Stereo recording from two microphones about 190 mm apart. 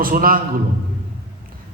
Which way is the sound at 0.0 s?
50° right (ahead or behind).